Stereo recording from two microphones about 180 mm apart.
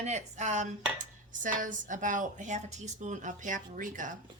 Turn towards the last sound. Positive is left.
turn(degrees=-45)  # may be behind; listen again after turning